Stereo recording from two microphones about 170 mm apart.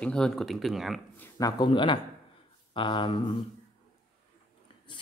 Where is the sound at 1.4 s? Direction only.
30° left (ahead or behind).